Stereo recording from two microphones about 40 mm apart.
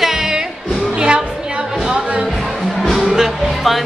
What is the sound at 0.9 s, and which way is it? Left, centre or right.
Music, right.